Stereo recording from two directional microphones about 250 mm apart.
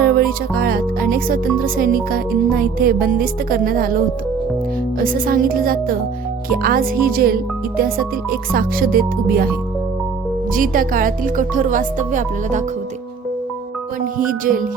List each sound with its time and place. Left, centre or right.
0.0 s music: right
8.5 s music: right
10.5 s music: right
14.3 s music: right